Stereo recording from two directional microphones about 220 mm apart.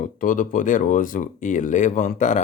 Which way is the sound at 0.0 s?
40° left (ahead or behind).